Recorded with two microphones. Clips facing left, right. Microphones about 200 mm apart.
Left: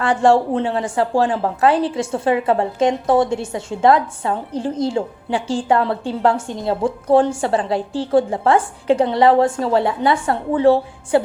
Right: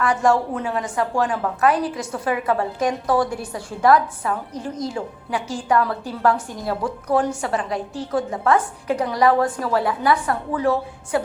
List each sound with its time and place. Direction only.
0.0 s a woman's voice: 30° left (ahead or behind)